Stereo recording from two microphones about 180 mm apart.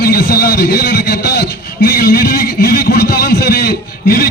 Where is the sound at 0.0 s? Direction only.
55° left (ahead or behind).